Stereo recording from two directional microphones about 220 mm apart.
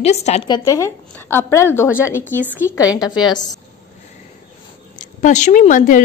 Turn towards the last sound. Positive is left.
turn(degrees=35)  # may be behind; listen again after turning